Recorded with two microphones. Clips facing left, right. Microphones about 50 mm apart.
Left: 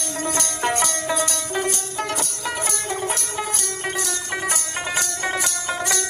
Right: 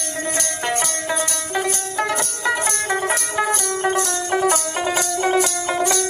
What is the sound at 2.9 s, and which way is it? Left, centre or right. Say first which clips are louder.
Music: right 8 dB; right.